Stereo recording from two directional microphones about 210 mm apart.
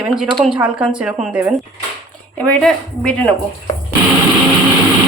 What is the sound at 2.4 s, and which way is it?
Speech, 5° left (ahead or behind).